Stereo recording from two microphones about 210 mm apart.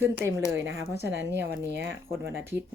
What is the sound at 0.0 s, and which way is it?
A woman's voice, 10° right (ahead or behind).